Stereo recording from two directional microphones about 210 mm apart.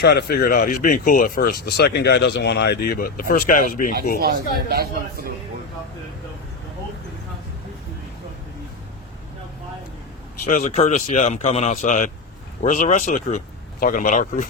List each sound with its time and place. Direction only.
0.0 s speech: 50° left (ahead or behind)
4.2 s speech: 45° right (ahead or behind)
10.5 s speech: 35° left (ahead or behind)